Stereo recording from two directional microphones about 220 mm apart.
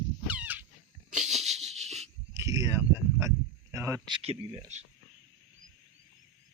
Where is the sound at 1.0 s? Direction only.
35° right (ahead or behind).